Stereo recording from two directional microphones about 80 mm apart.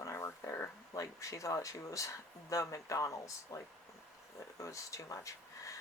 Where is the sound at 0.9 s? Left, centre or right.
Left.